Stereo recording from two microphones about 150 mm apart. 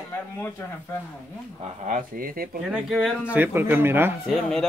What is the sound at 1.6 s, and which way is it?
Speech, 55° right (ahead or behind).